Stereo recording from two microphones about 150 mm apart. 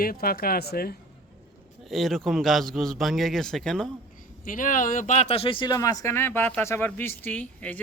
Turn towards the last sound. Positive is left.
turn(degrees=10)  # may be behind; listen again after turning